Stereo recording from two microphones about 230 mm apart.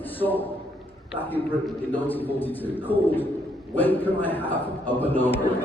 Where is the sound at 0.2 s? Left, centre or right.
Centre.